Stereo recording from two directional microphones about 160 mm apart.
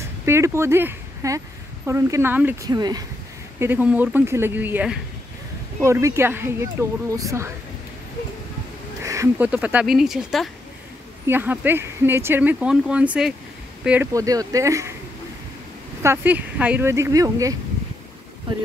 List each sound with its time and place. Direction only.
0.2 s speech: 15° right (ahead or behind)
2.7 s speech: 25° right (ahead or behind)
3.5 s speech: 15° right (ahead or behind)
9.0 s a sound: 20° right (ahead or behind)
9.5 s speech: 10° right (ahead or behind)
11.2 s speech: 15° right (ahead or behind)
14.1 s speech: 20° right (ahead or behind)
16.0 s speech: 15° right (ahead or behind); by 18.6 s 30° right (ahead or behind)